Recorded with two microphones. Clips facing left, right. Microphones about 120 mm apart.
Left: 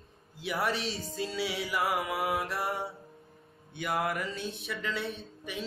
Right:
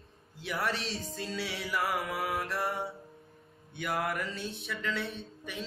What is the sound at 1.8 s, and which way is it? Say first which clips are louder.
Music: left 2 dB; 15° left (ahead or behind).